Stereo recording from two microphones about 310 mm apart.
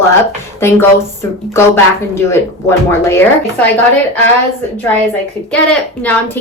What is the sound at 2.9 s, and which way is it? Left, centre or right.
Speech, centre.